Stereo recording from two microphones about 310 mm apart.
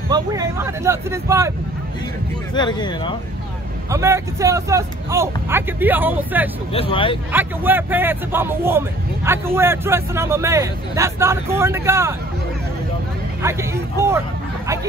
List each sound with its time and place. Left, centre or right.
0.1 s speech: centre
2.5 s speech: centre
3.9 s speech: centre
6.7 s speech: centre
7.3 s speech: centre
13.4 s speech: centre